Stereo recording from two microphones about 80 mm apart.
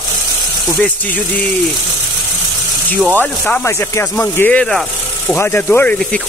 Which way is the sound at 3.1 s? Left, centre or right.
Left.